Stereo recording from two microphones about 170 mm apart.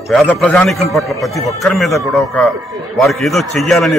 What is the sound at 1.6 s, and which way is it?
A man's voice, centre (ahead or behind).